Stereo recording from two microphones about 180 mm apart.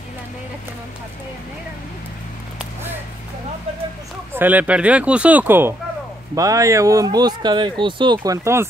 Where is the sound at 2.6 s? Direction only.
10° right (ahead or behind).